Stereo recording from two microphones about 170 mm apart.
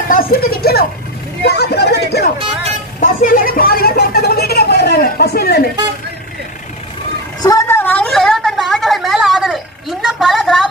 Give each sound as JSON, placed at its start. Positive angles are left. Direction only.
{"t": 0.1, "sound": "speech", "side_deg": 60}
{"t": 3.0, "sound": "speech", "side_deg": 50}
{"t": 7.4, "sound": "a sound", "side_deg": 15}